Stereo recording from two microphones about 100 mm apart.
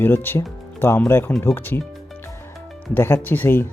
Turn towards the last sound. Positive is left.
turn(degrees=20)  # may be behind; listen again after turning